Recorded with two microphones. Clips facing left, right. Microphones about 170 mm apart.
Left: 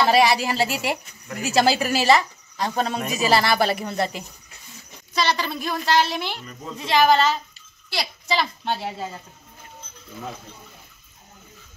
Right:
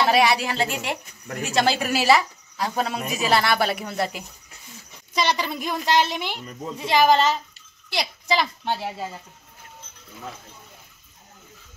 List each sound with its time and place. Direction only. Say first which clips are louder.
0.0 s speech: left 1 dB; centre (ahead or behind)
5.1 s a child's voice: even; 15° right (ahead or behind)